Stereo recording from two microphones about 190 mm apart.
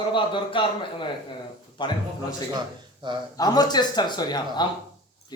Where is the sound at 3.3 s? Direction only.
20° left (ahead or behind).